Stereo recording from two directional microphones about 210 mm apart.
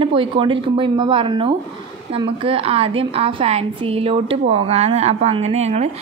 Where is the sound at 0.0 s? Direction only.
25° right (ahead or behind).